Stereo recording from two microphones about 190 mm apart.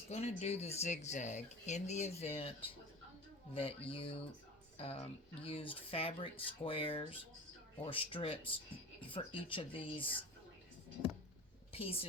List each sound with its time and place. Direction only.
0.1 s speech: 35° left (ahead or behind)
11.7 s a woman's voice: 30° left (ahead or behind)